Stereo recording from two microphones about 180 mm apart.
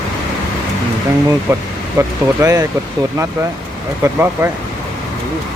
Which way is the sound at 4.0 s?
15° right (ahead or behind).